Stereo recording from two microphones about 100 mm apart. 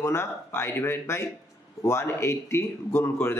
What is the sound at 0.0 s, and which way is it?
A man's voice, 25° left (ahead or behind).